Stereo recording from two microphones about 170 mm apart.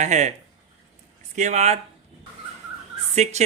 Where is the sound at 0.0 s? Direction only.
45° right (ahead or behind).